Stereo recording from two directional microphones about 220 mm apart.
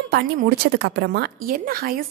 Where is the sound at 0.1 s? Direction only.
45° right (ahead or behind).